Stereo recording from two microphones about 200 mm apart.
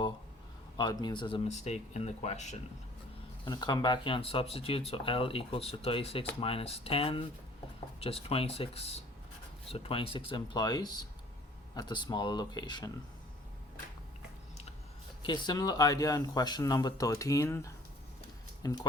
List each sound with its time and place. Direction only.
0.8 s speech: 20° left (ahead or behind)
1.5 s speech: 35° left (ahead or behind)
3.4 s speech: 20° left (ahead or behind)
15.2 s speech: 20° left (ahead or behind)